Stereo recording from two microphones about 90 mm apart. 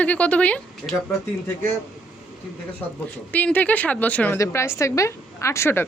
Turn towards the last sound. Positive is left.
turn(degrees=30)  # may be behind; listen again after turning